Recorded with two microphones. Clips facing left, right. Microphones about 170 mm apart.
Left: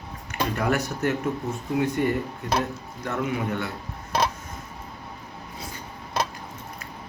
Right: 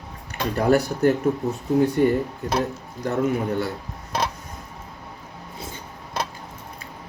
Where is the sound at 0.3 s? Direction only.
35° right (ahead or behind).